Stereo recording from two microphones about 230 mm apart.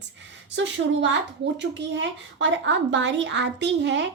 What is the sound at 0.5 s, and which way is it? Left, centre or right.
A woman's voice, right.